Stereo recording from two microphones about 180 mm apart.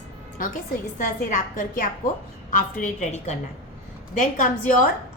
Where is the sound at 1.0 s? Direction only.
45° left (ahead or behind).